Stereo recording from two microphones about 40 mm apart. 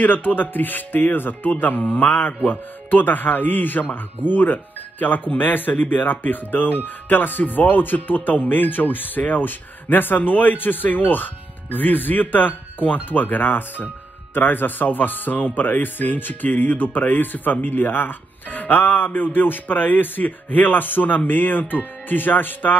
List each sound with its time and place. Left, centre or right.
0.0 s speech: left